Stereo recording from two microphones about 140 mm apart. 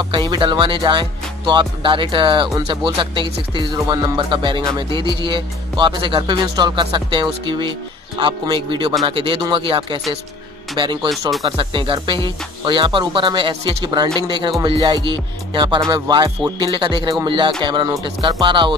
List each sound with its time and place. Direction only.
0.1 s speech: 30° right (ahead or behind)